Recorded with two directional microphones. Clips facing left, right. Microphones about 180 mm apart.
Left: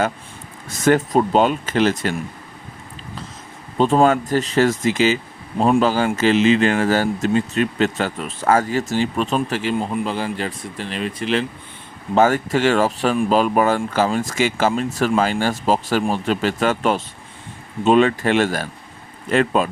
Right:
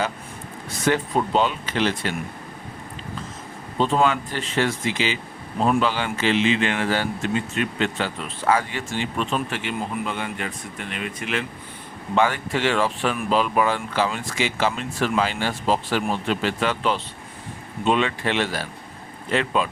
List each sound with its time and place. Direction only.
0.9 s speech: 45° left (ahead or behind)
3.8 s speech: 50° left (ahead or behind); by 11.4 s 30° left (ahead or behind)
12.1 s speech: 40° left (ahead or behind)